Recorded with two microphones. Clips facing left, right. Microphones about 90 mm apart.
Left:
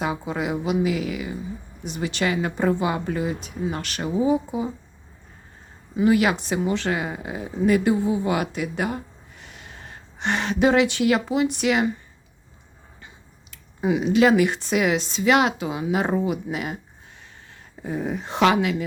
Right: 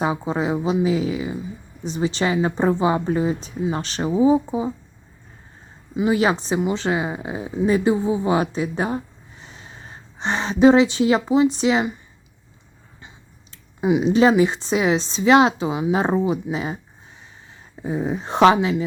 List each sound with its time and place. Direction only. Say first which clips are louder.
0.0 s speech: right 4 dB; 30° right (ahead or behind)
6.0 s speech: even; 25° right (ahead or behind)
9.4 s a sound: right 1 dB; 25° right (ahead or behind)
11.5 s speech: right 2 dB; 25° right (ahead or behind)
13.8 s speech: right 3 dB; 20° right (ahead or behind)
14.1 s speech: right 1 dB; 30° right (ahead or behind)
17.8 s speech: right 3 dB; 20° right (ahead or behind)
18.3 s speech: right 5 dB; 35° right (ahead or behind)